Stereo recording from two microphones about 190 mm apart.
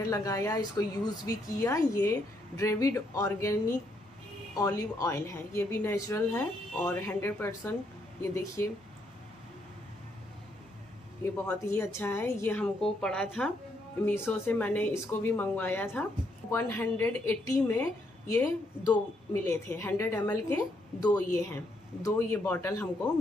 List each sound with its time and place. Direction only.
0.1 s a woman's voice: 15° left (ahead or behind)
11.4 s a woman's voice: 15° left (ahead or behind)